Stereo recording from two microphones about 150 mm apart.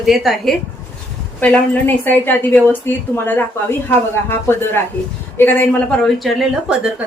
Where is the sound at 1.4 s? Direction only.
10° left (ahead or behind).